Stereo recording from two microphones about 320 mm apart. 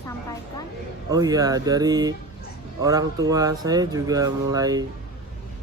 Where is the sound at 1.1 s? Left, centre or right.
Centre.